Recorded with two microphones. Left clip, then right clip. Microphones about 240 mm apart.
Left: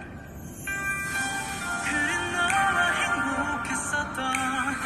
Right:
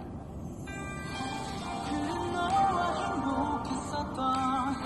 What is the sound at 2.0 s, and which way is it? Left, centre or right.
Music, left.